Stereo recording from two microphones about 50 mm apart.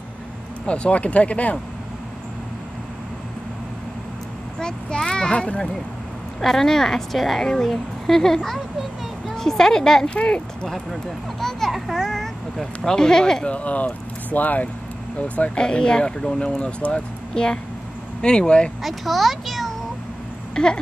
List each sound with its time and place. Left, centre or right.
0.7 s speech: left
4.6 s speech: centre
6.4 s speech: centre
10.0 s speech: left
10.7 s speech: centre
13.5 s speech: left
15.6 s speech: centre
18.8 s a child's voice: centre
20.6 s speech: centre